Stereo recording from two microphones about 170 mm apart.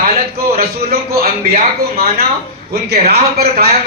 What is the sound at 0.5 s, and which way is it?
A man's voice, 65° right (ahead or behind).